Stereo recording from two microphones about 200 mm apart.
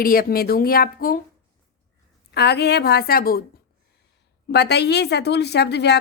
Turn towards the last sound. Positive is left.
turn(degrees=55)  # may be behind; listen again after turning